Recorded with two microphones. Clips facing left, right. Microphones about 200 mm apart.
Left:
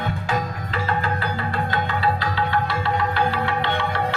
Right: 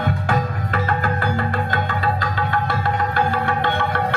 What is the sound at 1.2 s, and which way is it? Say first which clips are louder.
Music: right 3 dB; 50° right (ahead or behind).